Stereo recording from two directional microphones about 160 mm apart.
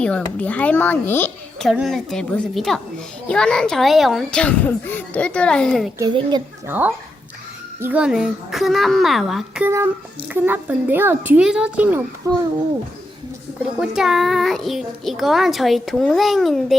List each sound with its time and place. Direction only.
0.0 s a child's voice: 10° left (ahead or behind)
1.7 s a child's voice: centre (ahead or behind)
6.0 s a child's voice: 30° right (ahead or behind)
6.7 s a child's voice: 10° right (ahead or behind)
9.6 s speech: 15° right (ahead or behind)
12.2 s a child's voice: 20° right (ahead or behind)
13.7 s a child's voice: 5° right (ahead or behind)